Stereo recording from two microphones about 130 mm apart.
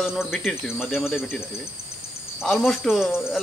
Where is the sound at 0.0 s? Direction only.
5° right (ahead or behind).